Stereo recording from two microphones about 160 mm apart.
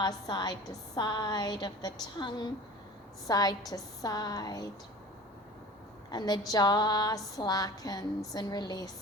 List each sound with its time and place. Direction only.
0.0 s a woman's voice: 25° left (ahead or behind)
6.1 s a woman's voice: 25° left (ahead or behind)